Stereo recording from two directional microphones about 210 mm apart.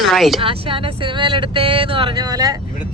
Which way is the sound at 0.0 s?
Centre (ahead or behind).